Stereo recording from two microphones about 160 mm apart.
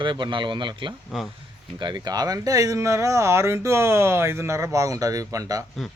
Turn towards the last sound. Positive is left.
turn(degrees=-20)  # may be behind; listen again after turning